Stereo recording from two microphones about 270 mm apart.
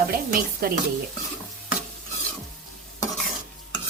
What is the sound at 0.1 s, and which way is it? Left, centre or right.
Speech, right.